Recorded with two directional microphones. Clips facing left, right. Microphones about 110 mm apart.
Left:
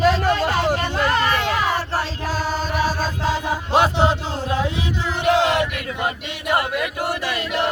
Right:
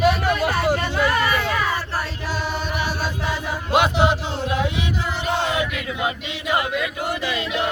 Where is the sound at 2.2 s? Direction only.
40° left (ahead or behind).